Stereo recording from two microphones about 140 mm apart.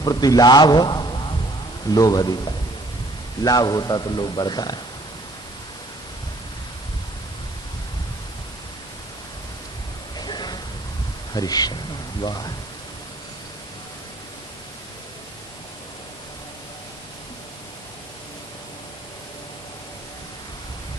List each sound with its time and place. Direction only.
0.0 s a man's voice: 30° left (ahead or behind)
10.2 s a sound: 30° left (ahead or behind)
11.3 s a man's voice: 30° left (ahead or behind)